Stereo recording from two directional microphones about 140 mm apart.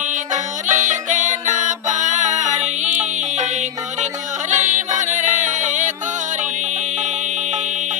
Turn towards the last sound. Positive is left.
turn(degrees=-60)  # may be behind; listen again after turning